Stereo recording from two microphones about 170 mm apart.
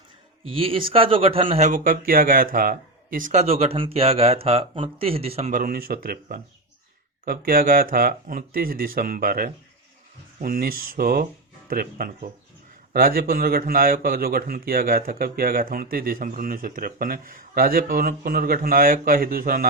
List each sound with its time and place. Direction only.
0.4 s speech: 30° right (ahead or behind)
5.5 s a man's voice: 55° right (ahead or behind)